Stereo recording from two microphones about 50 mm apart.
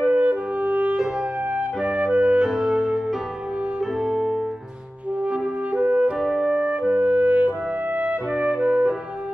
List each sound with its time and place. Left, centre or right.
0.0 s music: right
4.0 s music: centre
5.8 s music: right
8.0 s music: centre